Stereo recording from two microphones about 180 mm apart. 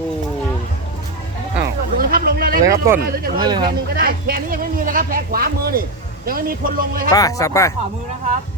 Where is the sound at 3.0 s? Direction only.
55° right (ahead or behind).